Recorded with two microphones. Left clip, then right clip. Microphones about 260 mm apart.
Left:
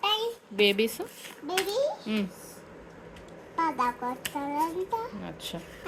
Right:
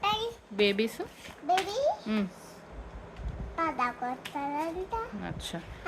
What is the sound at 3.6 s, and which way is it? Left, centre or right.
A child's voice, centre.